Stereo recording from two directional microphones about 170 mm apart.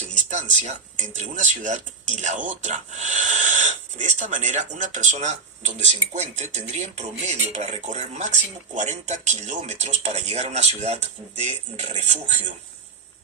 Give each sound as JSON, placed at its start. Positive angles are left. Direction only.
{"t": 0.0, "sound": "speech", "side_deg": -45}